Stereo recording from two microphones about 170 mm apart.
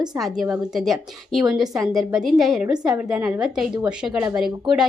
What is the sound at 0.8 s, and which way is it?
A woman's voice, centre (ahead or behind).